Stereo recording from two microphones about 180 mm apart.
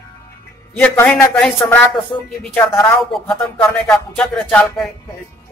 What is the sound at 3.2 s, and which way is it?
Speech, centre (ahead or behind).